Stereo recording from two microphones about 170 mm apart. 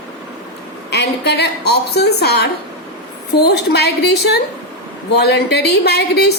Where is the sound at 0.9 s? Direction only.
80° left.